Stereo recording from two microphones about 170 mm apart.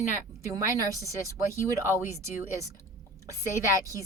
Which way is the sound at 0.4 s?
20° right (ahead or behind).